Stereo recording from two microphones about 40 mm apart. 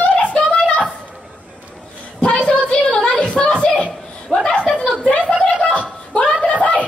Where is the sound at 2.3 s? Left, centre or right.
Left.